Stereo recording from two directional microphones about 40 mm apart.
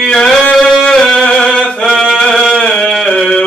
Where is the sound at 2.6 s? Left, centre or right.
Centre.